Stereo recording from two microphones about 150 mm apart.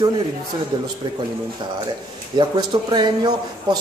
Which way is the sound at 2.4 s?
30° right (ahead or behind).